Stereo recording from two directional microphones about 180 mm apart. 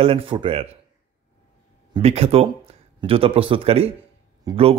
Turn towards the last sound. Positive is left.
turn(degrees=-20)  # may be behind; listen again after turning